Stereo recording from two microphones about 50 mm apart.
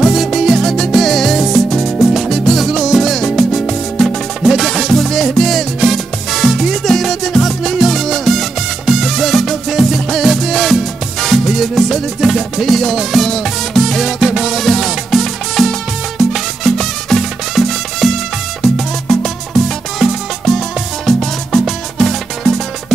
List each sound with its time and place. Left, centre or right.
0.0 s music: centre
14.6 s music: centre
20.0 s music: centre